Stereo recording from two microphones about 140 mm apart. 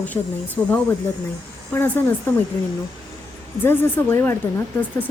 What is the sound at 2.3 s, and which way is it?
Speech, 15° left (ahead or behind).